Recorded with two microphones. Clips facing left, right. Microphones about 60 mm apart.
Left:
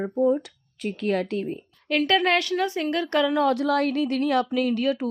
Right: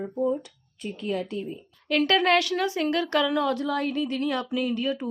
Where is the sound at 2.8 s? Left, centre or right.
Centre.